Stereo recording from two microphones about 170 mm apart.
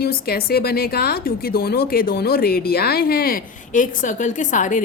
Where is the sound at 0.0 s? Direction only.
65° left (ahead or behind).